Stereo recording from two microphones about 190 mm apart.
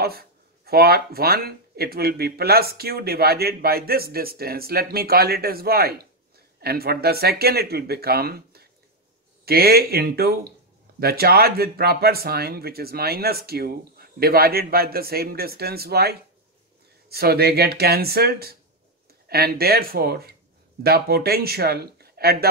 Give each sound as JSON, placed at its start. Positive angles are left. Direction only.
{"t": 0.0, "sound": "speech", "side_deg": -55}